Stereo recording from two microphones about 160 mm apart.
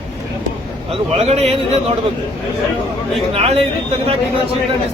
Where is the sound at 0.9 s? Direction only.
40° right (ahead or behind).